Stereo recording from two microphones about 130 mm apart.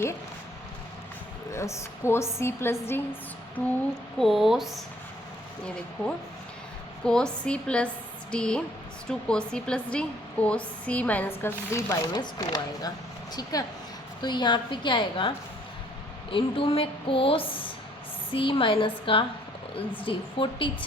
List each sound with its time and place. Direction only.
1.5 s a woman's voice: 20° left (ahead or behind)
4.2 s speech: centre (ahead or behind)
7.0 s a woman's voice: 5° left (ahead or behind)
12.0 s a woman's voice: 35° left (ahead or behind)
16.3 s a woman's voice: 45° left (ahead or behind)